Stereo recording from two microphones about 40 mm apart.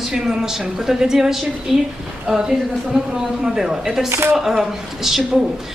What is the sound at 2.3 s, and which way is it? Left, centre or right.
A woman's voice, right.